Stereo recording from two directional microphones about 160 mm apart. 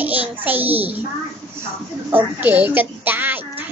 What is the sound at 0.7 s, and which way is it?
Speech, 40° right (ahead or behind).